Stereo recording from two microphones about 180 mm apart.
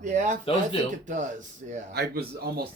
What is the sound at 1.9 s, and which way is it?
Speech, 60° right (ahead or behind).